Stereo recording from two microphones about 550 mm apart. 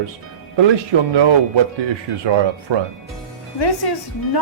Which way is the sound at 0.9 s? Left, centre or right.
Right.